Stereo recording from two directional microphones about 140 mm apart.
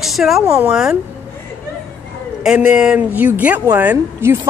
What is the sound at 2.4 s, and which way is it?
A woman's voice, 10° right (ahead or behind).